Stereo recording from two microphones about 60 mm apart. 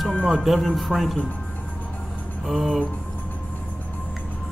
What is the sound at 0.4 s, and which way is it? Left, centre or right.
Mantra, centre.